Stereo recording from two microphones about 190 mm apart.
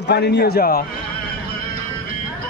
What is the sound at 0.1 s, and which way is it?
Speech, 60° left (ahead or behind).